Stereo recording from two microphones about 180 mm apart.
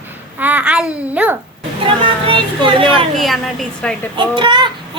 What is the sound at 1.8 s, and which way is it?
A child's voice, 30° right (ahead or behind).